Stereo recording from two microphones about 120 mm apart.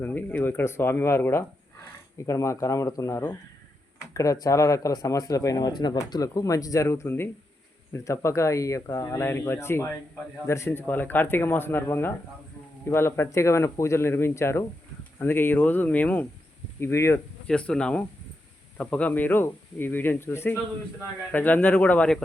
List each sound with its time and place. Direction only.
0.0 s speech: 15° left (ahead or behind)
17.4 s speech: 10° left (ahead or behind)